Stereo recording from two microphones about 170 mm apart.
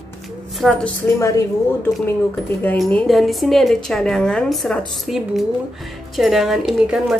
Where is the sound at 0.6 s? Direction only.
Centre (ahead or behind).